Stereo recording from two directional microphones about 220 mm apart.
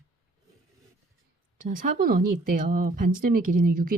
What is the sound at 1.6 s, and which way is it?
Speech, 40° right (ahead or behind).